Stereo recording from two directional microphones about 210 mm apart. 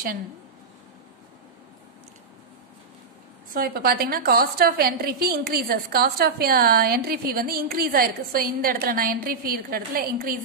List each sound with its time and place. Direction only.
3.5 s a woman's voice: 45° right (ahead or behind)